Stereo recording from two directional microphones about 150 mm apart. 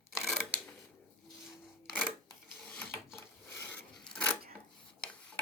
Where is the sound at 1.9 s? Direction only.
5° right (ahead or behind).